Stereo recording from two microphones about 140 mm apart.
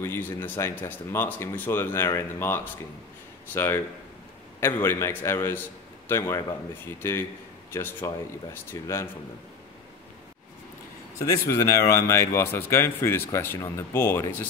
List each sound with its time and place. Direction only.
0.0 s speech: 15° left (ahead or behind)
11.1 s speech: 20° left (ahead or behind)